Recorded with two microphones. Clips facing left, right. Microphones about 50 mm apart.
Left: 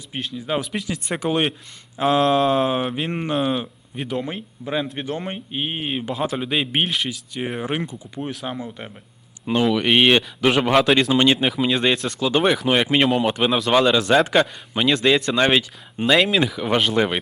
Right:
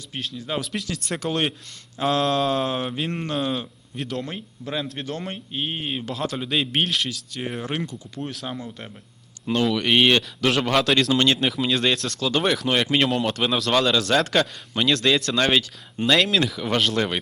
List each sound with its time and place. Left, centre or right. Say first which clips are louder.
0.2 s a man's voice: left 4 dB; centre